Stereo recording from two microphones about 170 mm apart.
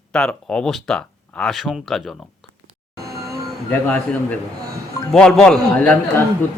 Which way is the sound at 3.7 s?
10° left (ahead or behind).